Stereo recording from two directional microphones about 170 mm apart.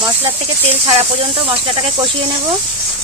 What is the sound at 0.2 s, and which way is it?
Speech, 35° right (ahead or behind).